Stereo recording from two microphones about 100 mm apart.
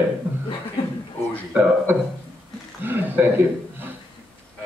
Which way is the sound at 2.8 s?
20° right (ahead or behind).